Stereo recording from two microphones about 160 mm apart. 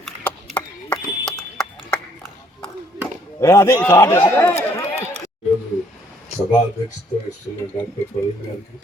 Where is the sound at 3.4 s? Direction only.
20° left (ahead or behind).